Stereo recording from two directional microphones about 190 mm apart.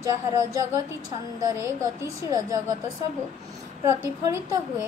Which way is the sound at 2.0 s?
15° right (ahead or behind).